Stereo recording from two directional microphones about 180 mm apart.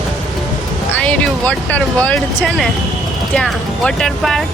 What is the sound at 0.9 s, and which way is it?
Speech, 5° left (ahead or behind).